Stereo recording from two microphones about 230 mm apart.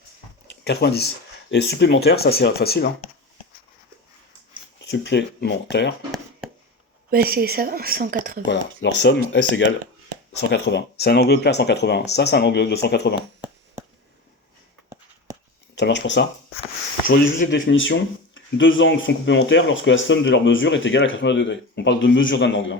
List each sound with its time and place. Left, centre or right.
0.6 s speech: left
4.9 s speech: left
7.3 s speech: right
8.4 s speech: left
15.7 s speech: left
17.1 s speech: left
17.6 s speech: left